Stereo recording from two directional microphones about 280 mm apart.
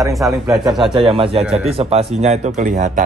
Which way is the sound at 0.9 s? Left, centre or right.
Centre.